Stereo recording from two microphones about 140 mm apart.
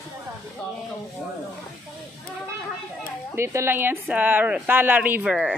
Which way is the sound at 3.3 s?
20° right (ahead or behind).